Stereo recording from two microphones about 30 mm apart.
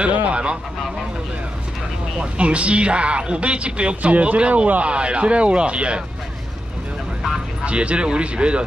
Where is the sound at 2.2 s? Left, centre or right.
Right.